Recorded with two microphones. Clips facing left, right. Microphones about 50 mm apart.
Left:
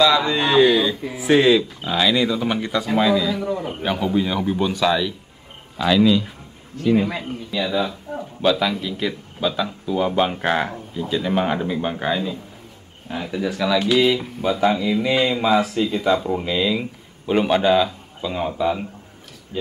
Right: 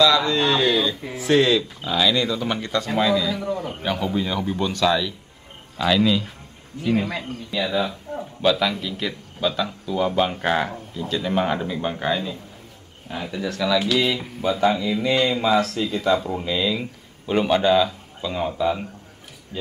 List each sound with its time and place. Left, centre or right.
0.0 s speech: centre
7.5 s speech: centre
19.5 s speech: centre